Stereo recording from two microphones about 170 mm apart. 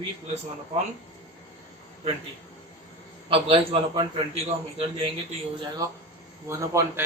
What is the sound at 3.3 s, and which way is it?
A man's voice, 35° right (ahead or behind).